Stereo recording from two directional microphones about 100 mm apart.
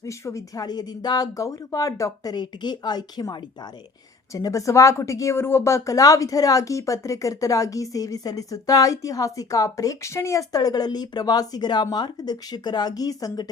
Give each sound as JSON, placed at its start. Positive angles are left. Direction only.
{"t": 0.0, "sound": "speech", "side_deg": 30}
{"t": 2.3, "sound": "speech", "side_deg": 45}
{"t": 4.4, "sound": "speech", "side_deg": 35}